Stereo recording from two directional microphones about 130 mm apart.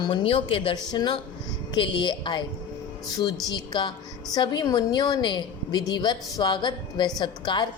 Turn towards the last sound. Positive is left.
turn(degrees=35)  # may be behind; listen again after turning